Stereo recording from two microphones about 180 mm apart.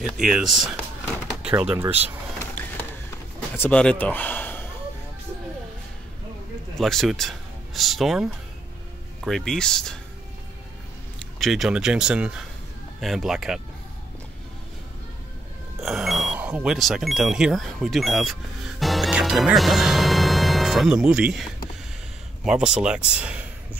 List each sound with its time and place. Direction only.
0.0 s speech: centre (ahead or behind)
3.5 s a man's voice: 10° left (ahead or behind)
6.8 s speech: centre (ahead or behind)
11.1 s speech: centre (ahead or behind)
15.8 s speech: centre (ahead or behind)